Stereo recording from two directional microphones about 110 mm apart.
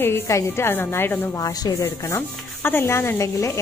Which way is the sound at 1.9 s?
25° left (ahead or behind).